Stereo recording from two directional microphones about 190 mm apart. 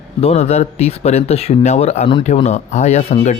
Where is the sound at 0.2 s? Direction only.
35° left (ahead or behind).